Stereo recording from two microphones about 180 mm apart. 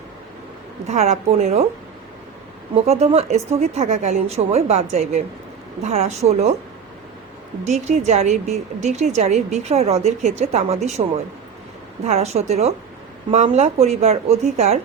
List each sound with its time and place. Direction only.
0.9 s speech: 40° right (ahead or behind)
2.8 s speech: 35° right (ahead or behind)
7.6 s speech: 40° right (ahead or behind)
12.0 s speech: 35° right (ahead or behind)